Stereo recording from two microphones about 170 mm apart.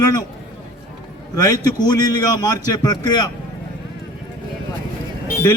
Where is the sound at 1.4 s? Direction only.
20° left (ahead or behind).